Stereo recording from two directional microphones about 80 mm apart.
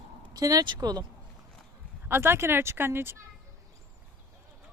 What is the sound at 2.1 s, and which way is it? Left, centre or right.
Speech, right.